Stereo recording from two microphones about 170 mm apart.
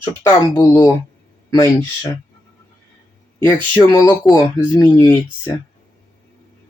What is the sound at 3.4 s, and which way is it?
Speech, 15° left (ahead or behind).